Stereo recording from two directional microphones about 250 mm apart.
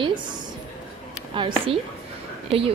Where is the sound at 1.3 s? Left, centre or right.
Right.